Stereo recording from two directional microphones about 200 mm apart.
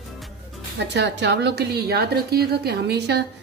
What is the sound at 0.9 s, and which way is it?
A woman's voice, 60° right (ahead or behind).